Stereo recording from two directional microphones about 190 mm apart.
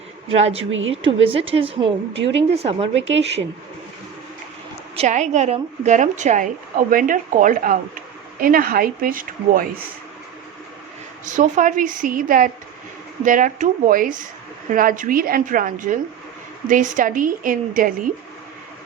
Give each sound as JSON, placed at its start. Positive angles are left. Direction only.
{"t": 0.7, "sound": "a woman's voice", "side_deg": -90}
{"t": 1.0, "sound": "speech", "side_deg": -30}
{"t": 2.9, "sound": "speech", "side_deg": -70}
{"t": 4.9, "sound": "a woman's voice", "side_deg": -40}
{"t": 11.3, "sound": "a woman's voice", "side_deg": -40}